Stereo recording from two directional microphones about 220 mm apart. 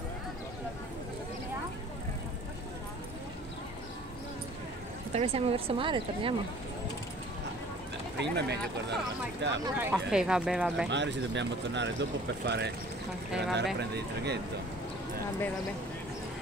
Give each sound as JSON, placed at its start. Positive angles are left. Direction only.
{"t": 5.1, "sound": "speech", "side_deg": -30}
{"t": 8.2, "sound": "speech", "side_deg": -50}
{"t": 9.8, "sound": "speech", "side_deg": -5}
{"t": 10.9, "sound": "speech", "side_deg": -55}